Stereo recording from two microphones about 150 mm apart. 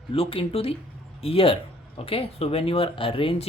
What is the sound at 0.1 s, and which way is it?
Speech, 40° left (ahead or behind).